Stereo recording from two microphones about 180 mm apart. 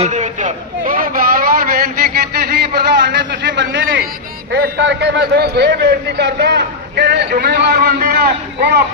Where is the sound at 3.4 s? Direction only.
80° right.